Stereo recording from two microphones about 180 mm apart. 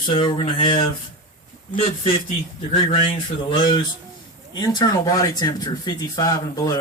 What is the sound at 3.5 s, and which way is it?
Speech, 25° left (ahead or behind).